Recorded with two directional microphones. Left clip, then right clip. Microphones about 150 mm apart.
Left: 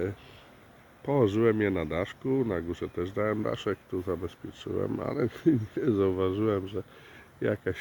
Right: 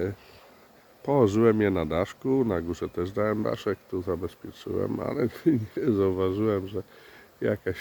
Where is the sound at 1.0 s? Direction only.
5° right (ahead or behind).